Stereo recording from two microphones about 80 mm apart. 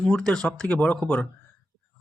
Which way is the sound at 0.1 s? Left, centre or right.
Centre.